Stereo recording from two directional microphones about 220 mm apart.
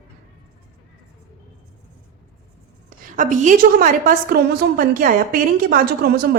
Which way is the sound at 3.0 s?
35° right (ahead or behind).